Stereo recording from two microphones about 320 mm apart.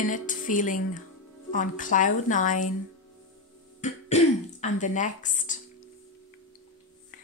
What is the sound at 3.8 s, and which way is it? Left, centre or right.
Throat clearing, left.